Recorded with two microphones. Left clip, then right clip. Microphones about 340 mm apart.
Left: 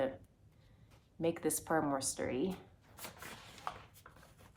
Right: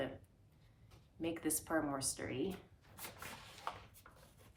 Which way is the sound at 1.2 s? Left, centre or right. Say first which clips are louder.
Left 5 dB; left.